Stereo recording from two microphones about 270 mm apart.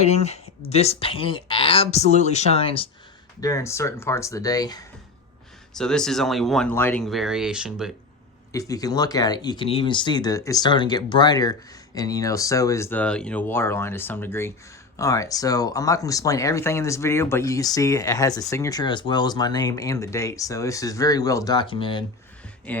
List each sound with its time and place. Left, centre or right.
0.0 s speech: left
5.7 s speech: centre
8.5 s speech: centre
22.7 s speech: centre